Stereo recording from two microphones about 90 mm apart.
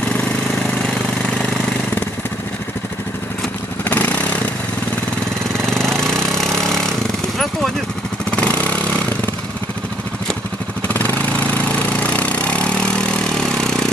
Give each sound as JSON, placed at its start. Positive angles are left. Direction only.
{"t": 3.9, "sound": "motorcycle", "side_deg": 15}
{"t": 5.6, "sound": "a sound", "side_deg": 5}
{"t": 8.3, "sound": "motorcycle", "side_deg": 15}
{"t": 10.9, "sound": "vehicle", "side_deg": 20}